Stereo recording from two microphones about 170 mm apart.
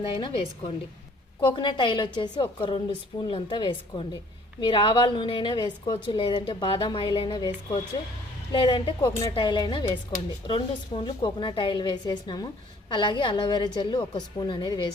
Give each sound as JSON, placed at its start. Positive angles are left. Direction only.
{"t": 1.4, "sound": "a woman's voice", "side_deg": 25}